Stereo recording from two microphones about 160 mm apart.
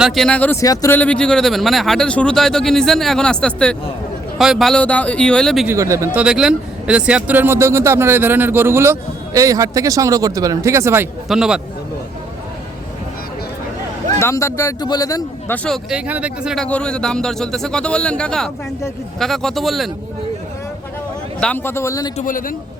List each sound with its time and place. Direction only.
0.0 s a man's voice: centre (ahead or behind)
0.6 s a man's voice: 20° left (ahead or behind)
0.9 s a man's voice: 10° left (ahead or behind)
5.6 s speech: 20° right (ahead or behind)
11.3 s a man's voice: 5° right (ahead or behind)
14.2 s a man's voice: 15° left (ahead or behind)
15.5 s a man's voice: 5° left (ahead or behind)
15.9 s speech: 10° right (ahead or behind)
16.6 s a man's voice: 5° left (ahead or behind)
21.4 s a man's voice: 10° left (ahead or behind)
22.2 s a man's voice: 55° left (ahead or behind)